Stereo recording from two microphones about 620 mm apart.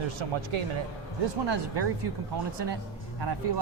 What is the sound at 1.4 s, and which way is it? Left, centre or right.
Speech, right.